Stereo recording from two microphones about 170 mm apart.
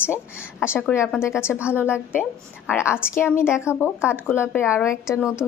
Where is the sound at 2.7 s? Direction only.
15° left (ahead or behind).